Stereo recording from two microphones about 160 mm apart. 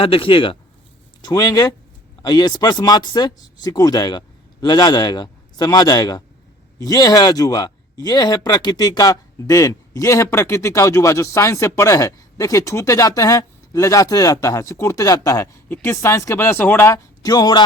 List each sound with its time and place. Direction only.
0.0 s speech: 35° left (ahead or behind)